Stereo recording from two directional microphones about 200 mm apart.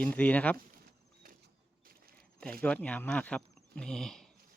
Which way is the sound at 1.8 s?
50° right (ahead or behind).